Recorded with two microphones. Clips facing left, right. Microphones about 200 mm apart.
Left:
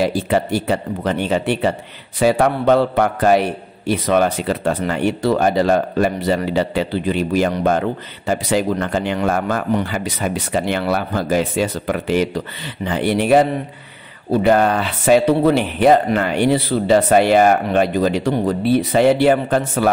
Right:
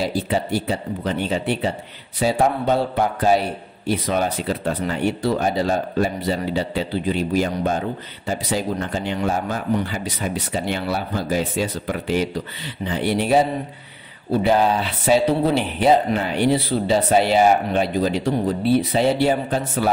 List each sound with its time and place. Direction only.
0.0 s speech: 65° left (ahead or behind)